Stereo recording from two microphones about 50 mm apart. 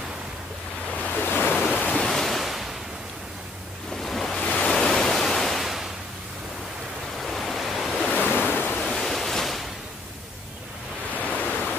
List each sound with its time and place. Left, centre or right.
1.0 s waves: left
2.0 s waves: centre
3.9 s waves: centre
4.4 s waves: centre
4.7 s pink noise: centre
7.2 s waves: centre
8.2 s waves: left
8.8 s a sound: centre
11.1 s ocean: left